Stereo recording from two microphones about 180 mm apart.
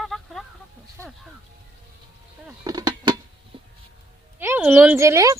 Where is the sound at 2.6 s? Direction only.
20° right (ahead or behind).